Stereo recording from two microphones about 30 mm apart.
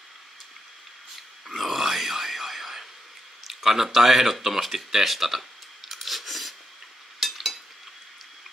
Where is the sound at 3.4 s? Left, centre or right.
Centre.